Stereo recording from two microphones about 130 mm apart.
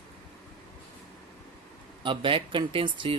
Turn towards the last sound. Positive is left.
turn(degrees=-40)  # may be behind; listen again after turning